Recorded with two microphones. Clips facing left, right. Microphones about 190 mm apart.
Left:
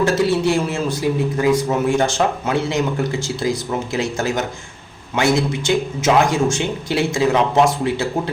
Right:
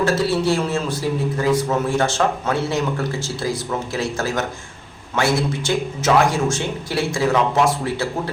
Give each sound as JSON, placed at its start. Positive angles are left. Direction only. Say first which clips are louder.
{"t": 0.0, "sound": "a man's voice", "louder": "left 2 dB", "side_deg": 15}